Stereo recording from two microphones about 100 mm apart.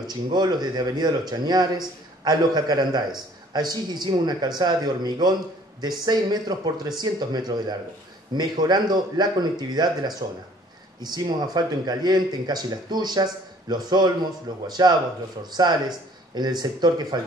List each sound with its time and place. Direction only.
0.0 s speech: 45° right (ahead or behind)